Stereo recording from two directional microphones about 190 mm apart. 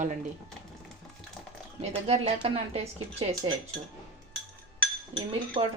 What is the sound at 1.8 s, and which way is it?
Speech, 35° right (ahead or behind).